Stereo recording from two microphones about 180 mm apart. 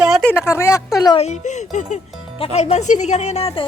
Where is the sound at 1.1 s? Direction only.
40° left (ahead or behind).